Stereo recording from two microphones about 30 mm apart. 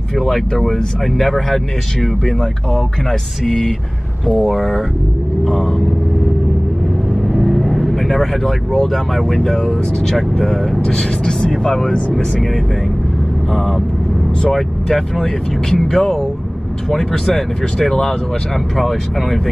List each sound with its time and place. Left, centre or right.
0.2 s speech: centre
3.4 s speech: centre
5.4 s speech: left
7.2 s speech: centre
10.8 s speech: left
13.5 s speech: centre